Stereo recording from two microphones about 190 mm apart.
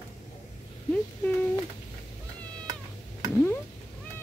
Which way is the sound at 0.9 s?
10° left (ahead or behind).